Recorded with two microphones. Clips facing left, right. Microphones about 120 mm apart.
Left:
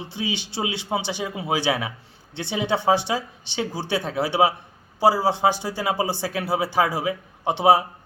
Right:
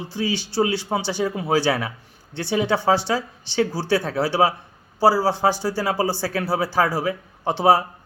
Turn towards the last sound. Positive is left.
turn(degrees=20)  # may be behind; listen again after turning